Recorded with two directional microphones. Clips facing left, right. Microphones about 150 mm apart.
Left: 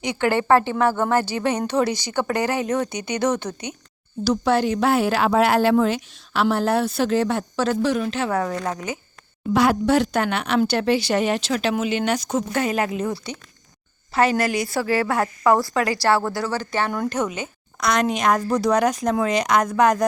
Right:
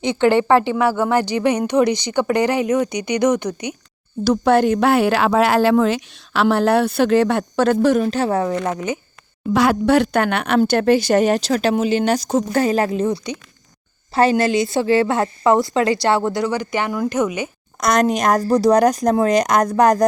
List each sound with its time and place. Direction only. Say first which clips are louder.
0.0 s speech: right 6 dB; 25° right (ahead or behind)
4.2 s a woman's voice: right 5 dB; 55° right (ahead or behind)
8.3 s a woman's voice: right 4 dB; 25° right (ahead or behind)
9.5 s a woman's voice: right 3 dB; 90° right; by 13.1 s 35° right (ahead or behind)
14.1 s a woman's voice: right 4 dB; 30° right (ahead or behind); by 17.5 s 10° right (ahead or behind)
17.7 s speech: right 4 dB; 45° right (ahead or behind)